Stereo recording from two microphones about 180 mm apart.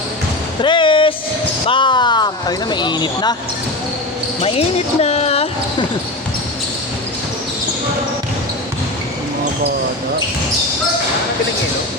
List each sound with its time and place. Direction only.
0.6 s a sound: 25° left (ahead or behind)
1.6 s speech: 25° left (ahead or behind)
4.4 s speech: 35° left (ahead or behind)